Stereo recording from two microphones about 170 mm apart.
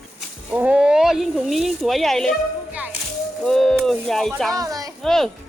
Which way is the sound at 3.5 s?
5° left (ahead or behind).